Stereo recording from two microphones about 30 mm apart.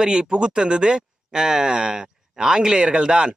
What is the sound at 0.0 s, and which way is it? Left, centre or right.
Speech, right.